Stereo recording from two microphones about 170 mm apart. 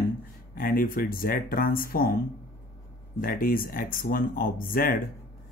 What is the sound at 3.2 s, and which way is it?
Speech, 55° left (ahead or behind).